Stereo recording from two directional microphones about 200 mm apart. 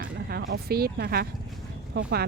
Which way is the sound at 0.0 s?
50° right (ahead or behind).